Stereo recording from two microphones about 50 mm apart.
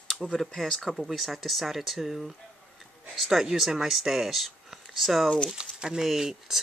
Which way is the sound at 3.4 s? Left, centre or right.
Centre.